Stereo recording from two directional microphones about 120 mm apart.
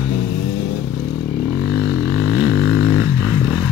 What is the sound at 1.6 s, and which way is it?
Vehicle, 25° right (ahead or behind).